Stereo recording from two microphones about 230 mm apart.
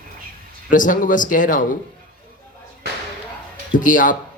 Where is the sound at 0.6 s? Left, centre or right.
Left.